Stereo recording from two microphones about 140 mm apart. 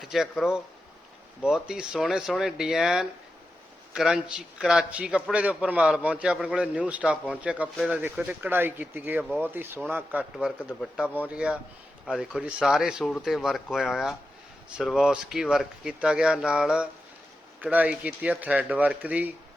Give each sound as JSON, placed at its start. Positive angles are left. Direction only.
{"t": 0.0, "sound": "a man's voice", "side_deg": 0}